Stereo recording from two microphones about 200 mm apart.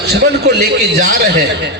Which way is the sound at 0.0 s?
55° right (ahead or behind).